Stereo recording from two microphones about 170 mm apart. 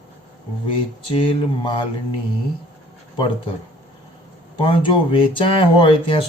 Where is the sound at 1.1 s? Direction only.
30° left (ahead or behind).